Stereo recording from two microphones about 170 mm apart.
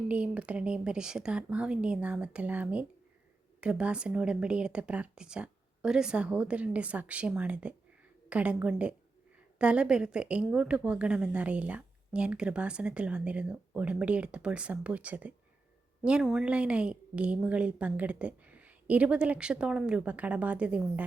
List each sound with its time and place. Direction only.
0.1 s a woman's voice: 5° right (ahead or behind)